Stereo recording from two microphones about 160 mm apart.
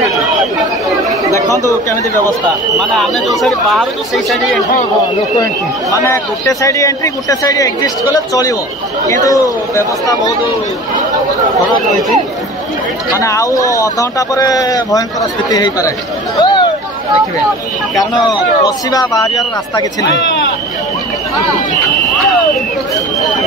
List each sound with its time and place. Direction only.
2.8 s speech: centre (ahead or behind)
6.6 s a man's voice: 20° left (ahead or behind)
13.1 s a man's voice: 20° left (ahead or behind)
16.3 s a sound: 25° left (ahead or behind)
18.9 s a man's voice: 25° left (ahead or behind)